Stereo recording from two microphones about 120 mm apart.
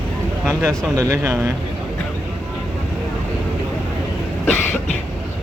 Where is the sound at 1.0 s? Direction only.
25° right (ahead or behind).